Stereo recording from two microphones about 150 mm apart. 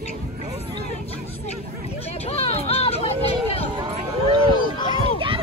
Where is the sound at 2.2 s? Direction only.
45° left (ahead or behind).